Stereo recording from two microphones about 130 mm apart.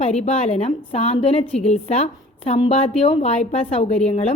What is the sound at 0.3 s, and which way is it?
A woman's voice, 55° left (ahead or behind).